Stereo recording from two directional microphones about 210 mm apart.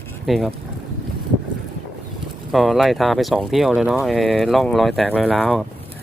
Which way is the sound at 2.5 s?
Centre (ahead or behind).